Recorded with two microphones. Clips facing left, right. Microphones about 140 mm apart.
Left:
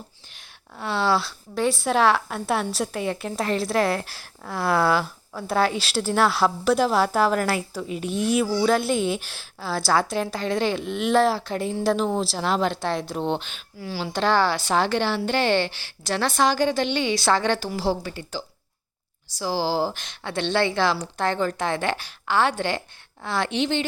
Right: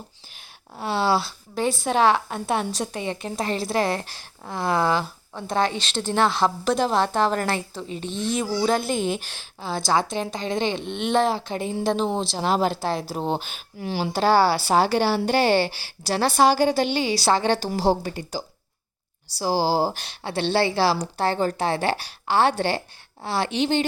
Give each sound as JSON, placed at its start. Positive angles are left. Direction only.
{"t": 0.9, "sound": "a woman's voice", "side_deg": 0}
{"t": 12.4, "sound": "speech", "side_deg": -35}
{"t": 12.7, "sound": "a woman's voice", "side_deg": -5}
{"t": 15.1, "sound": "speech", "side_deg": -40}
{"t": 18.2, "sound": "a woman's voice", "side_deg": -10}
{"t": 19.4, "sound": "speech", "side_deg": -40}
{"t": 23.6, "sound": "speech", "side_deg": -45}